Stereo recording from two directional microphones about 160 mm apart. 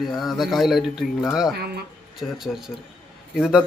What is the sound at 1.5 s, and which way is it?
Speech, 85° right.